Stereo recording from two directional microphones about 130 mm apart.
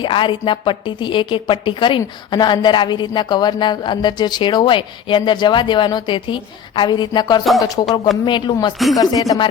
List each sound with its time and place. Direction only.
0.0 s a woman's voice: 40° left (ahead or behind)